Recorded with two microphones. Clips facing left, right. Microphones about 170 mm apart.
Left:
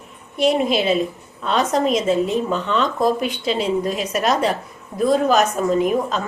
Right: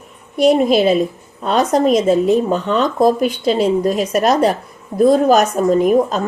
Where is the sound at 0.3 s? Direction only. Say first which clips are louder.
Right 6 dB; 40° right (ahead or behind).